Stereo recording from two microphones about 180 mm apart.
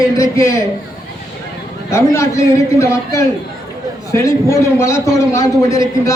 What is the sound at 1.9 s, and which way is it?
A man's voice, 15° left (ahead or behind).